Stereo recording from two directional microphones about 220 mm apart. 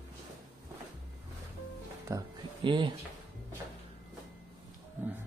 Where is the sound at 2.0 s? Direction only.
20° right (ahead or behind).